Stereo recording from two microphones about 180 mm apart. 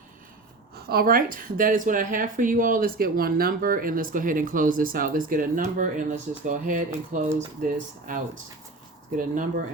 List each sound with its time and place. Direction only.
0.9 s speech: 55° right (ahead or behind)